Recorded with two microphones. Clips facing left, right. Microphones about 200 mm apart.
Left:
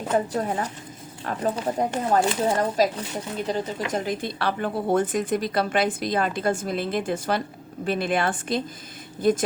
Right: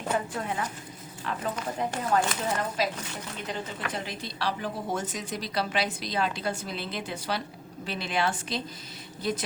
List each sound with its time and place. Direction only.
0.3 s speech: 40° left (ahead or behind)
2.0 s a woman's voice: 35° left (ahead or behind); by 9.4 s 50° left (ahead or behind)